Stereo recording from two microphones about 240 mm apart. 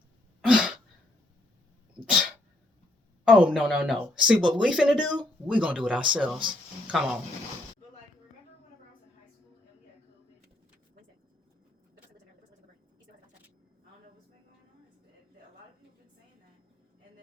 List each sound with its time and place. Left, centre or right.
0.4 s throat clearing: centre
3.2 s speech: centre